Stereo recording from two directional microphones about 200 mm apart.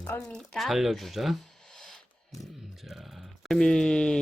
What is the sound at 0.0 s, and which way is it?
Speech, 5° left (ahead or behind).